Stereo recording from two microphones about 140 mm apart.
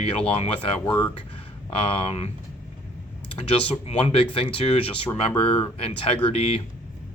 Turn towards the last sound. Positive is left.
turn(degrees=45)  # may be behind; listen again after turning